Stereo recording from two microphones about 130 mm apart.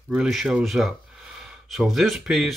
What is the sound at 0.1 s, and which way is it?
Speech, 5° right (ahead or behind).